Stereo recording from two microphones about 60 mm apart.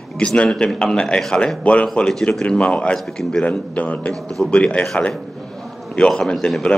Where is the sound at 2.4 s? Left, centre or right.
Centre.